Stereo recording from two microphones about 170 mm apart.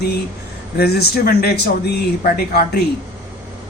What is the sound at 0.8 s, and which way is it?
Speech, 65° left (ahead or behind).